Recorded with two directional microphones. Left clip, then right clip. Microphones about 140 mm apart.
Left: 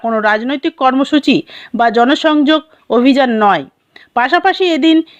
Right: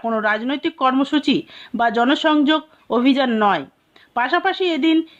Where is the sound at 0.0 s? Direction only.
35° left (ahead or behind).